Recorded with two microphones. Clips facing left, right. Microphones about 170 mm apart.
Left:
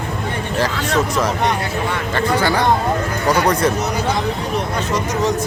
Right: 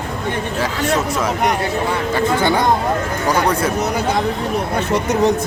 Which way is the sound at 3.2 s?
10° right (ahead or behind).